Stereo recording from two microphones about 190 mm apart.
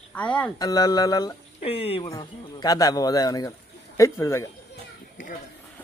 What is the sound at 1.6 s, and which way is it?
Speech, 30° left (ahead or behind).